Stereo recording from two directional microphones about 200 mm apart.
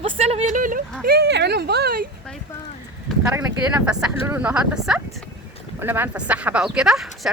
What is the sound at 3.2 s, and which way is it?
Speech, 15° right (ahead or behind).